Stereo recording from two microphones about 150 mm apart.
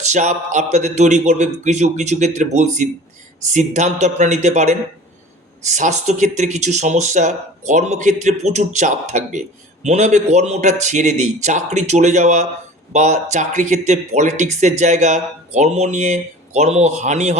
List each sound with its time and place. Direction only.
0.0 s speech: 50° right (ahead or behind)